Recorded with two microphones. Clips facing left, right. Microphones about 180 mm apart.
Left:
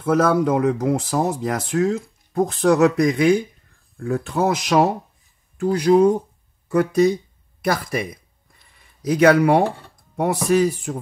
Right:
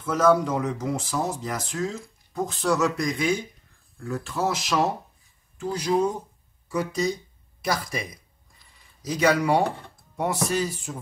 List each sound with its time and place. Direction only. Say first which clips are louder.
0.0 s speech: left 3 dB; 60° left (ahead or behind)